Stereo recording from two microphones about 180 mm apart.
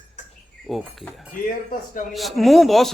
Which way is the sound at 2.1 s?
Centre (ahead or behind).